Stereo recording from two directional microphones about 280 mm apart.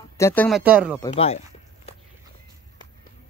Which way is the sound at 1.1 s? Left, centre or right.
Left.